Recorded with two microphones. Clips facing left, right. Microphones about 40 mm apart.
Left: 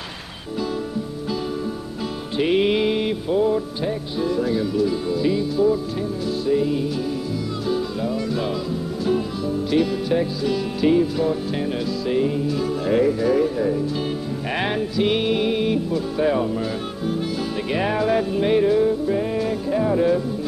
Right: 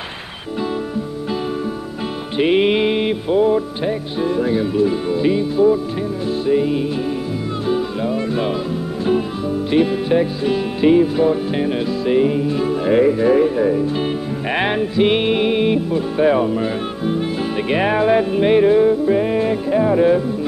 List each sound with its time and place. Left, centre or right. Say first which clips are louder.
2.3 s music: right 4 dB; right
9.7 s music: right 5 dB; right